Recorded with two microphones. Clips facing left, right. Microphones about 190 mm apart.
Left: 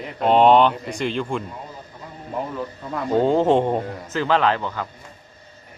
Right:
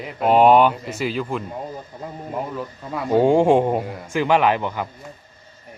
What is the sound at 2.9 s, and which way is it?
Speech, 10° right (ahead or behind).